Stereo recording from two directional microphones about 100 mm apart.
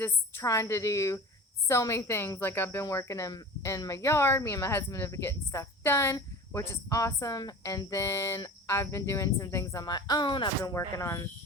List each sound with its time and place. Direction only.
0.4 s speech: 30° left (ahead or behind)
9.8 s speech: 45° left (ahead or behind)
10.6 s speech: 35° left (ahead or behind)